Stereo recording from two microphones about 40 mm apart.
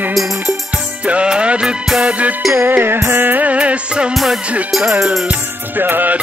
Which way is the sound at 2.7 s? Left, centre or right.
Right.